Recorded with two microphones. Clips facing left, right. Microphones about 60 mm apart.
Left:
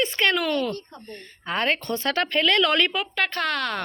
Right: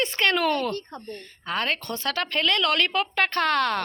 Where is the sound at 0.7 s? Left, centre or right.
Right.